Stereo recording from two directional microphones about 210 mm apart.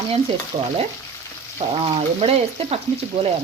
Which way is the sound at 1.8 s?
25° right (ahead or behind).